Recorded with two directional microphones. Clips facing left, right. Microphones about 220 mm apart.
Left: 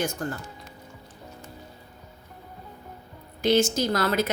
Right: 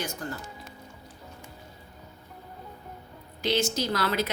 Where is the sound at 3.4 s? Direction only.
50° left (ahead or behind).